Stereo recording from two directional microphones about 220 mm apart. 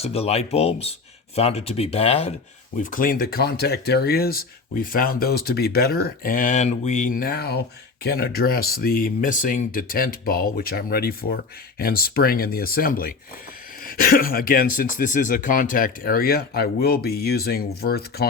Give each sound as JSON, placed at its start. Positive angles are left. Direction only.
{"t": 0.0, "sound": "speech", "side_deg": 25}
{"t": 2.7, "sound": "speech", "side_deg": 40}